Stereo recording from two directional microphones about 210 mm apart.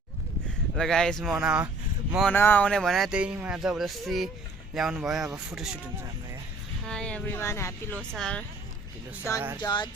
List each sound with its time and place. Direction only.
0.8 s speech: 5° left (ahead or behind)
2.1 s speech: 5° left (ahead or behind)
9.6 s music: 20° left (ahead or behind)